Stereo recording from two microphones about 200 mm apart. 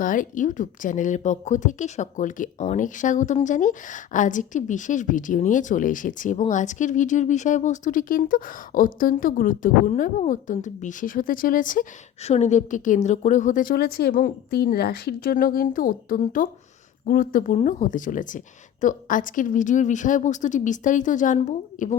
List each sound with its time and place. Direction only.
0.0 s speech: 40° left (ahead or behind)